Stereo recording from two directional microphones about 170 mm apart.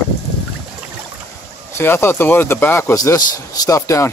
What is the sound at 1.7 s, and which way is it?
Speech, 15° left (ahead or behind).